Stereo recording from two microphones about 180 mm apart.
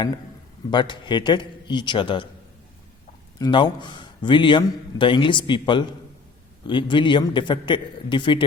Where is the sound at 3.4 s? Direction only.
25° left (ahead or behind).